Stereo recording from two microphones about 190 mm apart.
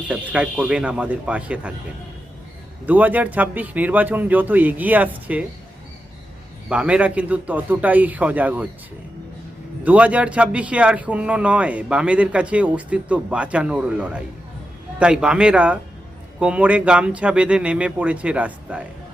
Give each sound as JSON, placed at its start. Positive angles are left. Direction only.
{"t": 0.1, "sound": "a man's voice", "side_deg": -5}
{"t": 2.8, "sound": "a man's voice", "side_deg": -10}
{"t": 6.7, "sound": "a man's voice", "side_deg": -5}
{"t": 9.8, "sound": "a man's voice", "side_deg": -5}